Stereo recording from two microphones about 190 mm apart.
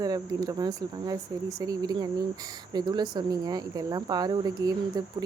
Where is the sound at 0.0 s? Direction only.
20° right (ahead or behind).